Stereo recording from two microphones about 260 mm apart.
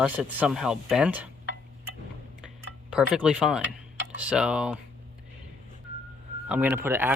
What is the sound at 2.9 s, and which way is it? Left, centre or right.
Speech, centre.